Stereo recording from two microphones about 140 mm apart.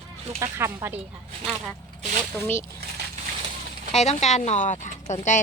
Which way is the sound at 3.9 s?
55° left (ahead or behind).